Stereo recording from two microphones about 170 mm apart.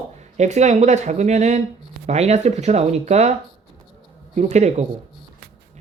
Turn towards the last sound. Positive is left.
turn(degrees=-40)  # may be behind; listen again after turning